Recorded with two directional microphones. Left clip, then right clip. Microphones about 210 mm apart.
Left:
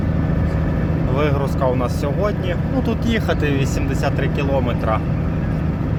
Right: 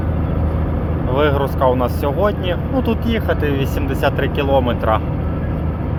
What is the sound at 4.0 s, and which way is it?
Speech, 5° left (ahead or behind).